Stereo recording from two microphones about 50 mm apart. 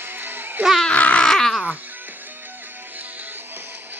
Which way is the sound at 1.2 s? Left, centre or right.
Centre.